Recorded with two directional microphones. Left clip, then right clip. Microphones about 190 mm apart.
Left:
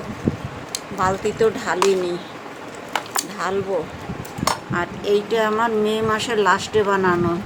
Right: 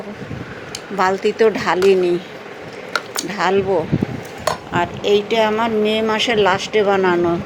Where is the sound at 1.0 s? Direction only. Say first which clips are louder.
Right 4 dB; 25° right (ahead or behind).